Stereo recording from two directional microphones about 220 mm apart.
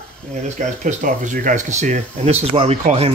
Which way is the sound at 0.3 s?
35° right (ahead or behind).